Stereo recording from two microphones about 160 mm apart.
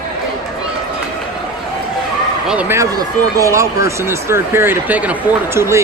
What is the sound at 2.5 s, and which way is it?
Speech, 10° right (ahead or behind).